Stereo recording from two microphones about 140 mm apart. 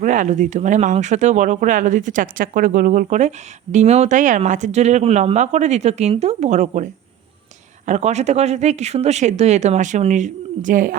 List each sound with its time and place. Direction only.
0.0 s speech: 65° right (ahead or behind)